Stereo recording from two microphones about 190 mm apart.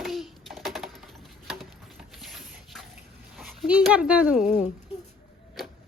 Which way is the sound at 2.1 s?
Centre (ahead or behind).